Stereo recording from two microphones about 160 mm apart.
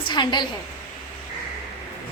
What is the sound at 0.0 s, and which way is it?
Speech, 30° left (ahead or behind).